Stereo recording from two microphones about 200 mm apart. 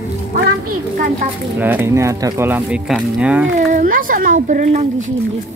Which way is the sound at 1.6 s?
10° right (ahead or behind).